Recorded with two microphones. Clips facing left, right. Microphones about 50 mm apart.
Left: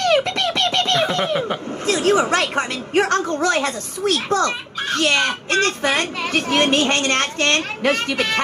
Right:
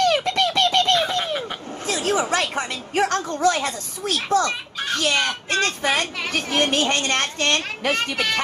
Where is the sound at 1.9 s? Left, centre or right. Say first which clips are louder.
Left 5 dB; left.